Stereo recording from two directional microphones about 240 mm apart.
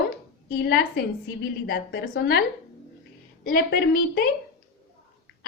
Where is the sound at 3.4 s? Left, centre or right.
Left.